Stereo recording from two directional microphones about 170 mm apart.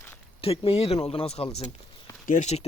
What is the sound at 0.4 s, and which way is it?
Speech, 35° left (ahead or behind).